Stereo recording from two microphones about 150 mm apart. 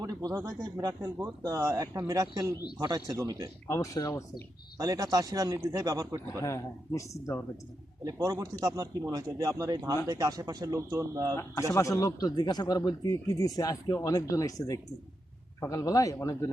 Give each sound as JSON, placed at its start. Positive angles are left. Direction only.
{"t": 0.0, "sound": "speech", "side_deg": -25}
{"t": 3.7, "sound": "speech", "side_deg": 20}
{"t": 4.8, "sound": "speech", "side_deg": -25}
{"t": 6.4, "sound": "speech", "side_deg": 20}
{"t": 8.0, "sound": "speech", "side_deg": -25}
{"t": 11.7, "sound": "speech", "side_deg": 20}